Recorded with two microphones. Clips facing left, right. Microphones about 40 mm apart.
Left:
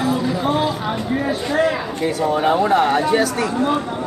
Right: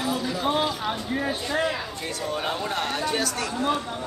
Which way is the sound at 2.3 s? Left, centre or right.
Centre.